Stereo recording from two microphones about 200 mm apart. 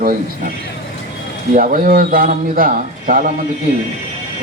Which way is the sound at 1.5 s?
40° right (ahead or behind).